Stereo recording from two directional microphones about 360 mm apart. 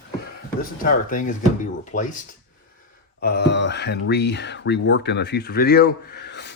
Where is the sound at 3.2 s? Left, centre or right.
Left.